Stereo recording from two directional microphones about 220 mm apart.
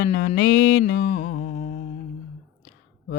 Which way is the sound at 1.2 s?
35° left (ahead or behind).